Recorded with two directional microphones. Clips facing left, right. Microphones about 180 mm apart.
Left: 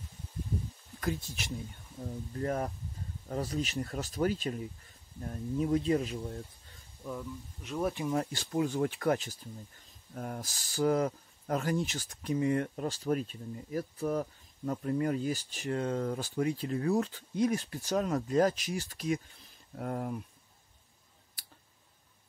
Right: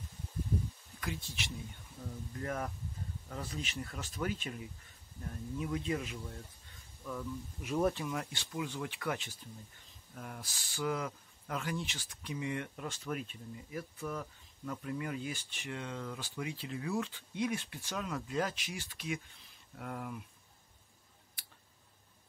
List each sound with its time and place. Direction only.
1.0 s speech: 45° left (ahead or behind); by 7.2 s 25° left (ahead or behind)
8.1 s speech: 40° left (ahead or behind)